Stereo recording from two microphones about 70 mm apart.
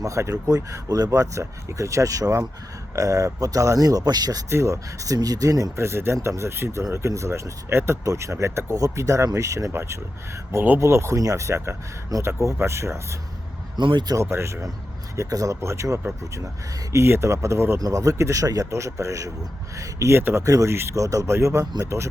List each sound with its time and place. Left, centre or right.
0.0 s speech: right
4.4 s speech: right
5.8 s speech: right
10.8 s speech: right
13.8 s speech: right
14.2 s speech: right
15.1 s speech: right
15.6 s speech: right
17.7 s speech: right
18.7 s speech: right
20.1 s speech: right
20.4 s speech: right
21.6 s speech: right